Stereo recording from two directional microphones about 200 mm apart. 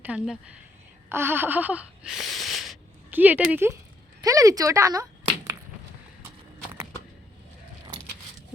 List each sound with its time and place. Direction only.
0.0 s speech: 5° right (ahead or behind)
1.1 s a sound: 10° right (ahead or behind)
4.2 s a woman's voice: 15° right (ahead or behind)